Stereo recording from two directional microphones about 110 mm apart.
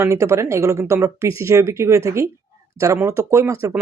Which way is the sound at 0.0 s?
25° right (ahead or behind).